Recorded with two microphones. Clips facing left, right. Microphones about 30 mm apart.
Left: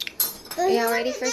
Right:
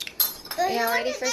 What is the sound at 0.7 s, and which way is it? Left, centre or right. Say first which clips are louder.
Speech: left 4 dB; centre.